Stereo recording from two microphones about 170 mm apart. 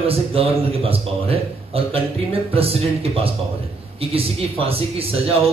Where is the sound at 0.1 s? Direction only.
35° right (ahead or behind).